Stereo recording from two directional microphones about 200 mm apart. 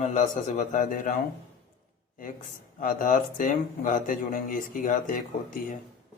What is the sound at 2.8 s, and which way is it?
Speech, 45° left (ahead or behind).